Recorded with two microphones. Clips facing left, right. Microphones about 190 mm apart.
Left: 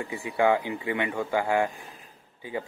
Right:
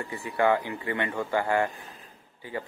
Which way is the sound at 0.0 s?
15° left (ahead or behind).